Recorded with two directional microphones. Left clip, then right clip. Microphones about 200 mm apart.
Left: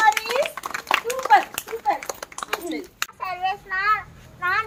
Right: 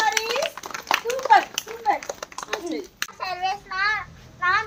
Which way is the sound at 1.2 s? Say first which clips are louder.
Even; 55° left (ahead or behind).